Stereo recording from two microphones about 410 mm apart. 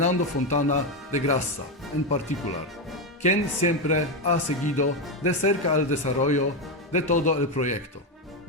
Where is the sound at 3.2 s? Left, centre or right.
Centre.